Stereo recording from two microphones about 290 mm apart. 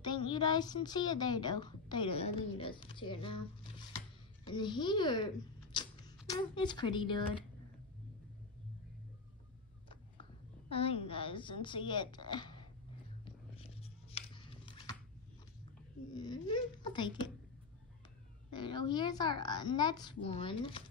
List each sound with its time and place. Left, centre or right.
0.0 s a woman's voice: centre
10.7 s a woman's voice: centre
13.2 s a sound: centre
16.1 s a woman's voice: centre
18.5 s a woman's voice: centre